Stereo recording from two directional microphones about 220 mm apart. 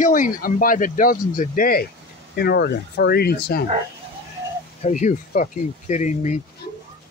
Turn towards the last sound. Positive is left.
turn(degrees=30)  # may be behind; listen again after turning